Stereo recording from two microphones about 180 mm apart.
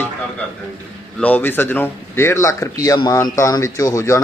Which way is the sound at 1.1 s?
10° left (ahead or behind).